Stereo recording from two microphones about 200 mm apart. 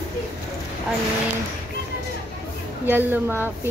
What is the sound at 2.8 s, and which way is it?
Speech, 10° right (ahead or behind).